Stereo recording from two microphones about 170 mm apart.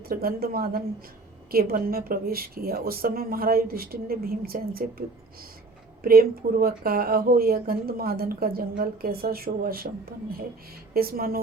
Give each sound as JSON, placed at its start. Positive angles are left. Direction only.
{"t": 0.0, "sound": "speech", "side_deg": -60}